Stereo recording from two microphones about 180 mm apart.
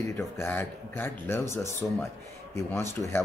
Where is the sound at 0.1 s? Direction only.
10° left (ahead or behind).